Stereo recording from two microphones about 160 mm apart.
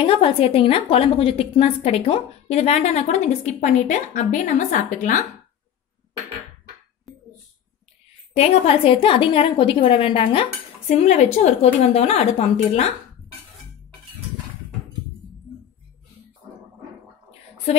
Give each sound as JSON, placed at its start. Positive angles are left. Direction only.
{"t": 0.0, "sound": "a woman's voice", "side_deg": 35}
{"t": 7.1, "sound": "a sound", "side_deg": 0}
{"t": 8.4, "sound": "a woman's voice", "side_deg": 40}